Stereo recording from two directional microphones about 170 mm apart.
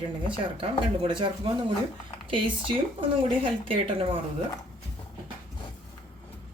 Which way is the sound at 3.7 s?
30° right (ahead or behind).